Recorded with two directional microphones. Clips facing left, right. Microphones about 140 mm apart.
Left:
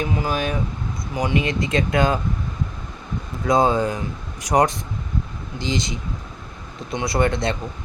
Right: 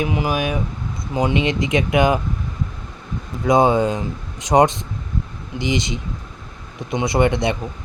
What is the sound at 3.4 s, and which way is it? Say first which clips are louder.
Speech: right 3 dB; 20° right (ahead or behind).